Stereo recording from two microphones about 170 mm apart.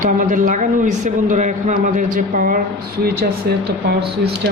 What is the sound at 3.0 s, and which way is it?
Speech, 65° right (ahead or behind).